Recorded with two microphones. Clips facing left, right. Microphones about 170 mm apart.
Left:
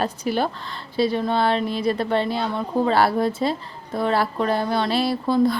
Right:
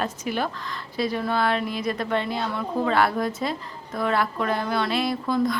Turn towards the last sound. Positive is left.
turn(degrees=30)  # may be behind; listen again after turning